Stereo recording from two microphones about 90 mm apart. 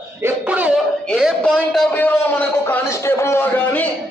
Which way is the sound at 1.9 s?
20° left (ahead or behind).